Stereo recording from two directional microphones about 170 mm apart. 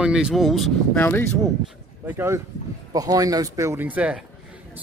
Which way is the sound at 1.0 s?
15° left (ahead or behind).